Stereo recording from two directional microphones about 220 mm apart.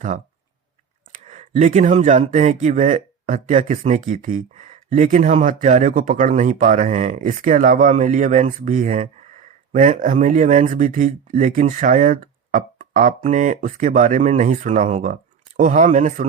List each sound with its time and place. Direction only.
1.3 s speech: 35° right (ahead or behind)